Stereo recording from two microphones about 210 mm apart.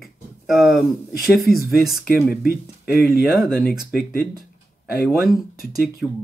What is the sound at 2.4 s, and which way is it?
Speech, 45° left (ahead or behind).